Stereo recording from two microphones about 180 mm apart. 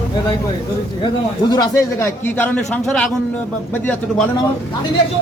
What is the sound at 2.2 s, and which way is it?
Speech, 10° left (ahead or behind).